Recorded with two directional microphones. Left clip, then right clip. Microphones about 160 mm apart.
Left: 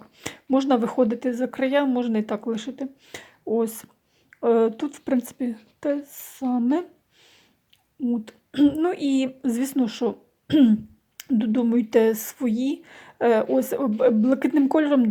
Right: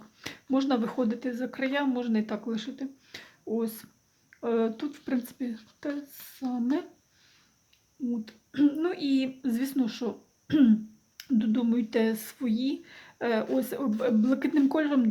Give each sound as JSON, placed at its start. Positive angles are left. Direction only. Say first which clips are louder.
{"t": 0.2, "sound": "speech", "louder": "left 6 dB", "side_deg": 35}
{"t": 8.1, "sound": "speech", "louder": "left 5 dB", "side_deg": 35}